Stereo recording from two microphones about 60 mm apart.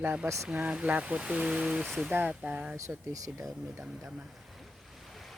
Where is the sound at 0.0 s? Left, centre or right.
Right.